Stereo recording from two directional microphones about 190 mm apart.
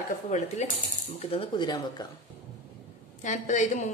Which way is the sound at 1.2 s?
30° left (ahead or behind).